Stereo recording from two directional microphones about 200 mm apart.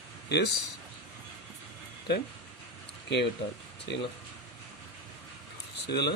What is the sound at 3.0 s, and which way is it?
Speech, 60° left (ahead or behind).